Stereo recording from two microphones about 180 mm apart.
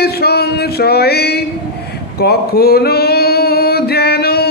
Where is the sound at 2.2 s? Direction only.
60° left (ahead or behind).